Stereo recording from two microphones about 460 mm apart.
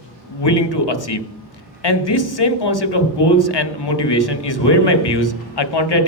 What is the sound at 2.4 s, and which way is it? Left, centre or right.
A man's voice, left.